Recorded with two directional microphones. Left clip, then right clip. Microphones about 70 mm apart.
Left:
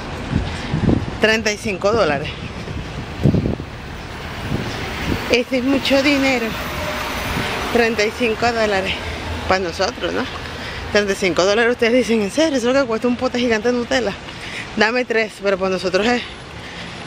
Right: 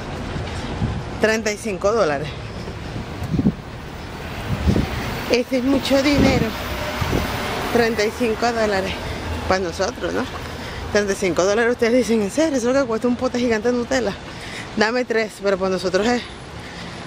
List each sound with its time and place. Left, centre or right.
1.2 s speech: centre
5.3 s speech: centre
7.7 s speech: centre